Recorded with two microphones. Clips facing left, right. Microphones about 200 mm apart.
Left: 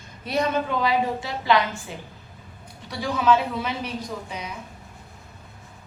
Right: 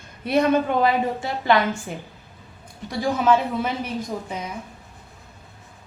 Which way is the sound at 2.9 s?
50° right (ahead or behind).